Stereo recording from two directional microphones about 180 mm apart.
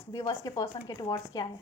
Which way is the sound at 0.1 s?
20° left (ahead or behind).